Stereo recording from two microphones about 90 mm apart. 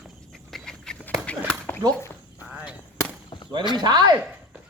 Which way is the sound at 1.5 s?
20° left (ahead or behind).